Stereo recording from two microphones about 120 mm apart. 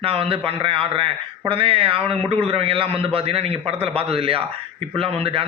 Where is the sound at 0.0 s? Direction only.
50° right (ahead or behind).